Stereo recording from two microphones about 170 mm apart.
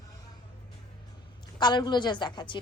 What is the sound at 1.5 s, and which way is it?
A woman's voice, 25° left (ahead or behind).